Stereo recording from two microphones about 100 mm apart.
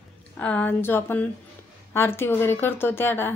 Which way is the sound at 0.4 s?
15° left (ahead or behind).